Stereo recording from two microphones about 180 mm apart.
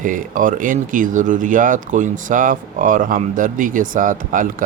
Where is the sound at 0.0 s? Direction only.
45° right (ahead or behind).